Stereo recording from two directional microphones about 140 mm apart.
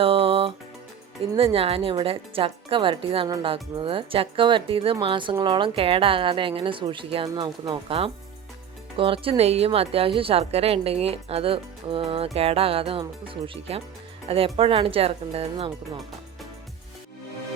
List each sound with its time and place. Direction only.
0.0 s music: 45° right (ahead or behind)
1.2 s a woman's voice: 45° right (ahead or behind)